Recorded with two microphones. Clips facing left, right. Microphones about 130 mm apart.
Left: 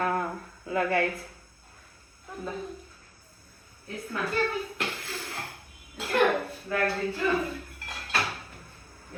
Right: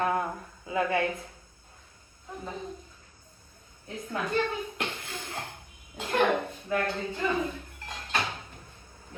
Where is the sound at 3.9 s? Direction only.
20° right (ahead or behind).